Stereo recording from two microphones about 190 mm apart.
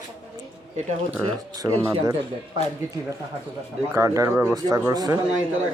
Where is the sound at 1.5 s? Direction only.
20° right (ahead or behind).